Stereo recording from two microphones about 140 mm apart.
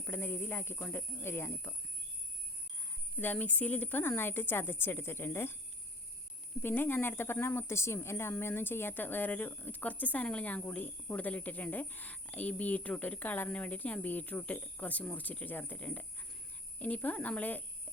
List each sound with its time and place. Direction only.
0.0 s a woman's voice: 15° left (ahead or behind)
3.2 s a woman's voice: 10° left (ahead or behind)
6.6 s a woman's voice: 15° left (ahead or behind)